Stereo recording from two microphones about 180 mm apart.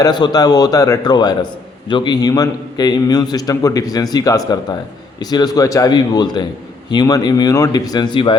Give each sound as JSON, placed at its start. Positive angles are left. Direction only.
{"t": 0.0, "sound": "a man's voice", "side_deg": 20}